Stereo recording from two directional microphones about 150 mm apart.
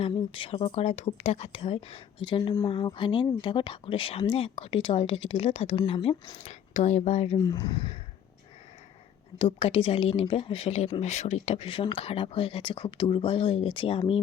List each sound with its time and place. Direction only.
0.0 s speech: 35° left (ahead or behind)
7.3 s speech: 25° left (ahead or behind)
9.4 s speech: 40° left (ahead or behind)